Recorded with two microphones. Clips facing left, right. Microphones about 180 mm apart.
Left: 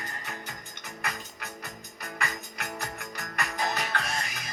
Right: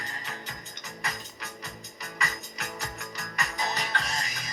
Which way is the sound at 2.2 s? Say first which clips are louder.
Even; 55° left (ahead or behind).